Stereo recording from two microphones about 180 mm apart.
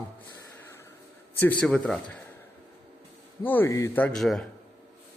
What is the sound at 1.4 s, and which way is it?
Speech, 5° left (ahead or behind).